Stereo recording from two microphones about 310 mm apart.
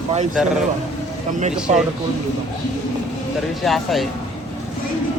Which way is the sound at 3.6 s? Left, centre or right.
Centre.